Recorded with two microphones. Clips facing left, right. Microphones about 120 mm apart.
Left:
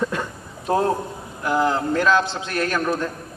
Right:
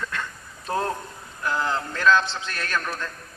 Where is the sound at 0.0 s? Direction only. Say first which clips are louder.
Left 8 dB; 20° left (ahead or behind).